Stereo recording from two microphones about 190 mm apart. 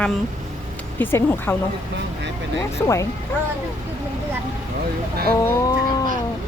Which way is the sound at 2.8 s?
15° left (ahead or behind).